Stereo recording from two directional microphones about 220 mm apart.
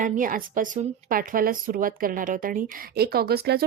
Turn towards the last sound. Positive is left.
turn(degrees=-45)  # may be behind; listen again after turning